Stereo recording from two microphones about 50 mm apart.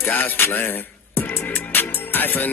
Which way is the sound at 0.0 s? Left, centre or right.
Left.